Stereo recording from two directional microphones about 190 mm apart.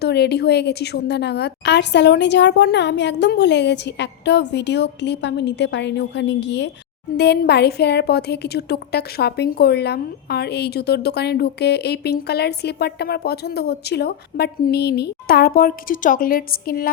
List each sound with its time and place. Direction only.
0.0 s a woman's voice: 60° left (ahead or behind)